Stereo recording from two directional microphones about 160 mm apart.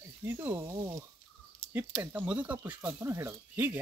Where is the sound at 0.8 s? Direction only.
25° right (ahead or behind).